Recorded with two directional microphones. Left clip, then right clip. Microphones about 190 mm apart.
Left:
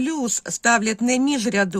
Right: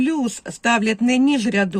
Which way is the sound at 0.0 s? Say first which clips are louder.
Right 3 dB; 25° left (ahead or behind).